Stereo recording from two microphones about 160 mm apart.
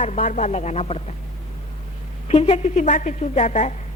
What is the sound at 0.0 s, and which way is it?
A woman's voice, 50° left (ahead or behind).